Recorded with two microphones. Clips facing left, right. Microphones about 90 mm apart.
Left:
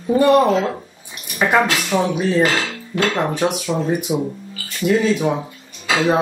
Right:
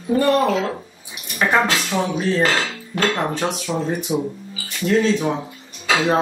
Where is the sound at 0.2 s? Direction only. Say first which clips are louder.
Left 4 dB; 20° left (ahead or behind).